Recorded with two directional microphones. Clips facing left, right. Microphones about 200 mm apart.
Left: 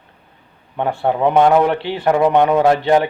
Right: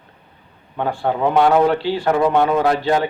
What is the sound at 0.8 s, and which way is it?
A man's voice, 20° left (ahead or behind).